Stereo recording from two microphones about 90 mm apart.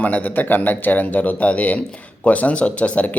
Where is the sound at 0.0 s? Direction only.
20° left (ahead or behind).